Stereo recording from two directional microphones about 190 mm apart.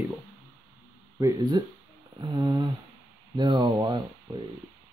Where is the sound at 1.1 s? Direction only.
20° right (ahead or behind).